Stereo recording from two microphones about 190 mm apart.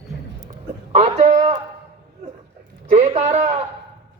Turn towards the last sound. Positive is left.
turn(degrees=-35)  # may be behind; listen again after turning